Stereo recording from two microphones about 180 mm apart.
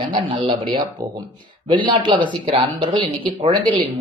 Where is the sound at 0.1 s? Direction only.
25° right (ahead or behind).